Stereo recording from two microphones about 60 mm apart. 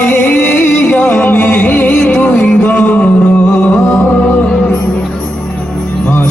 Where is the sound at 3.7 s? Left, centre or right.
Left.